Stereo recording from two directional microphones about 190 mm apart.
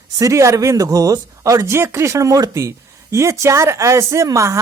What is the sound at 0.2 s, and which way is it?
Speech, 15° right (ahead or behind).